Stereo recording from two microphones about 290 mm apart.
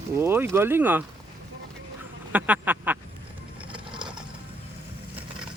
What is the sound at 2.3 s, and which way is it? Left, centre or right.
Speech, centre.